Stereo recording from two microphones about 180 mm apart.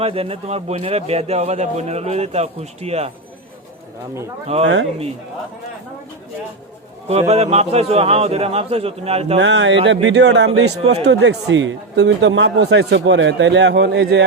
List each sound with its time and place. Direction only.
0.0 s a man's voice: 30° right (ahead or behind)
4.5 s a man's voice: 35° right (ahead or behind)
7.1 s a man's voice: 35° right (ahead or behind)
9.4 s a man's voice: 85° right